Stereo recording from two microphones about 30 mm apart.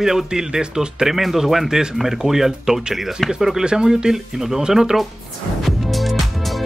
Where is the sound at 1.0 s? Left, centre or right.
Centre.